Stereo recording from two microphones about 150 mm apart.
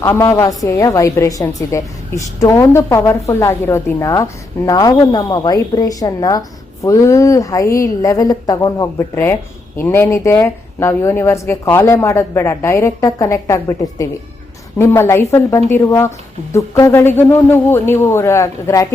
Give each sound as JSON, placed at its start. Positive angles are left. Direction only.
{"t": 0.0, "sound": "a woman's voice", "side_deg": 20}